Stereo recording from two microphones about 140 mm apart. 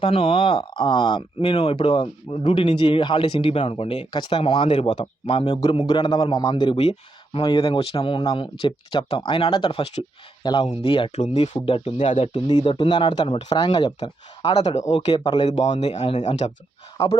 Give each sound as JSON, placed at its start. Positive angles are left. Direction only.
{"t": 0.0, "sound": "speech", "side_deg": 40}
{"t": 10.4, "sound": "speech", "side_deg": 30}
{"t": 11.9, "sound": "speech", "side_deg": 60}
{"t": 12.3, "sound": "speech", "side_deg": 35}